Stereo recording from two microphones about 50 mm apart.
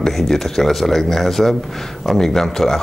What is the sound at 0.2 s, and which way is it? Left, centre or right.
Speech, centre.